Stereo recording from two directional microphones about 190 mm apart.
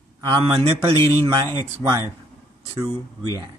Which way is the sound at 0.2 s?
25° right (ahead or behind).